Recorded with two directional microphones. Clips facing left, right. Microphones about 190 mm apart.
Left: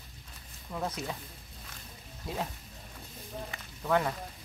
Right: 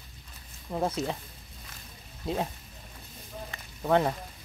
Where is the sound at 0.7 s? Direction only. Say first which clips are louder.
Right 6 dB; 30° right (ahead or behind).